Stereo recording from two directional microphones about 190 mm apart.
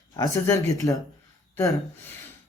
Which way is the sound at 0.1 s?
15° left (ahead or behind).